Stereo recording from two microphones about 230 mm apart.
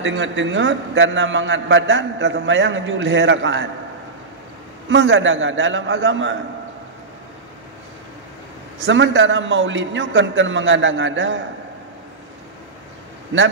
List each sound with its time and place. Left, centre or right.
0.0 s a man's voice: right
4.8 s a man's voice: right
8.8 s a man's voice: right